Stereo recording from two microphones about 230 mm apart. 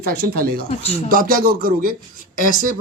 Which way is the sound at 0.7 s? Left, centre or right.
Left.